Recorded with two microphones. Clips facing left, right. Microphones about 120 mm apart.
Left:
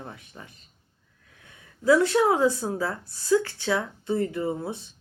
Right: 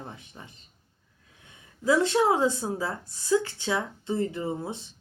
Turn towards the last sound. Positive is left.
turn(degrees=-20)  # may be behind; listen again after turning